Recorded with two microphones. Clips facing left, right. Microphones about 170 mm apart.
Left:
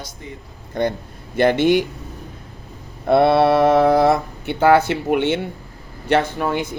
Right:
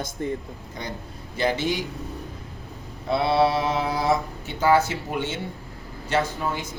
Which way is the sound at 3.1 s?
60° left (ahead or behind).